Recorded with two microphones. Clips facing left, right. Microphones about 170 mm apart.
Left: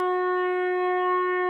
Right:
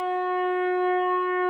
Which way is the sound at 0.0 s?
10° right (ahead or behind).